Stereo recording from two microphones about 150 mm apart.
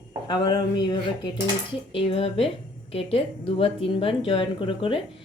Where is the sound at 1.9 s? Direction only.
40° left (ahead or behind).